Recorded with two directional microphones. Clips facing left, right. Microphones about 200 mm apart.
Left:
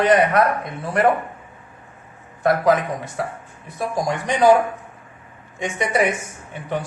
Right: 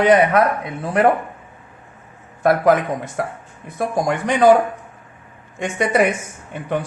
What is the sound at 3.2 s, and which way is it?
Speech, 50° right (ahead or behind).